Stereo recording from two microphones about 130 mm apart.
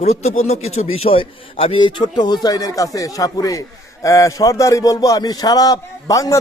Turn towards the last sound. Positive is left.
turn(degrees=25)  # may be behind; listen again after turning